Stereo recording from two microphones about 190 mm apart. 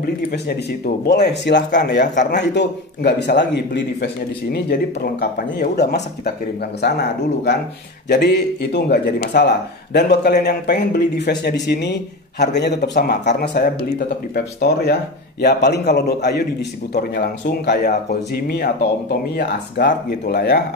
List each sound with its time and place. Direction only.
0.0 s a man's voice: 55° left (ahead or behind)